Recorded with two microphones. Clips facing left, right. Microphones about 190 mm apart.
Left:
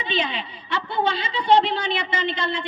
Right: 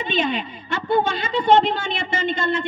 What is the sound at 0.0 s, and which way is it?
A woman's voice, 50° right (ahead or behind).